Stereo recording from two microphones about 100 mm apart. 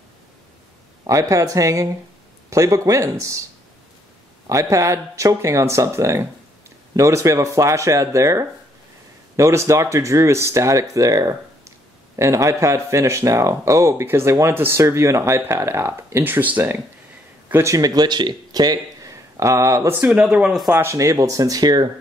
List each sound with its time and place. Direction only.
1.0 s speech: 35° right (ahead or behind)
4.5 s speech: 30° right (ahead or behind)
17.7 s speech: 40° right (ahead or behind)
20.0 s speech: 10° right (ahead or behind)
20.7 s speech: 30° right (ahead or behind)